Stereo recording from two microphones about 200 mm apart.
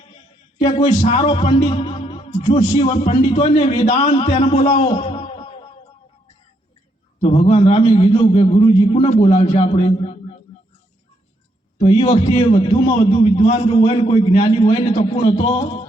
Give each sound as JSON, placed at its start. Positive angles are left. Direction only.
{"t": 0.9, "sound": "a man's voice", "side_deg": 40}
{"t": 1.2, "sound": "a man's voice", "side_deg": 25}
{"t": 7.2, "sound": "a man's voice", "side_deg": 35}
{"t": 11.8, "sound": "a man's voice", "side_deg": 25}